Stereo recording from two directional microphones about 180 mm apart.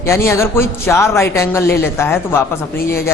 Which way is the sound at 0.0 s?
15° left (ahead or behind).